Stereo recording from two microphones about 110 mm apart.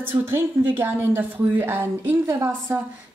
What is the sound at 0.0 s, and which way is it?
A woman's voice, 20° right (ahead or behind).